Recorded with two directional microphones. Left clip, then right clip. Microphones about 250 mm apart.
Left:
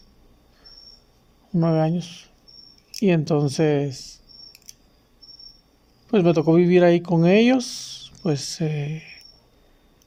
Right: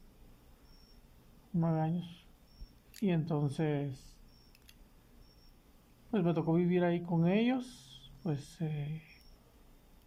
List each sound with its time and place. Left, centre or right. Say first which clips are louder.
1.5 s speech: left 14 dB; left
6.1 s speech: left 15 dB; left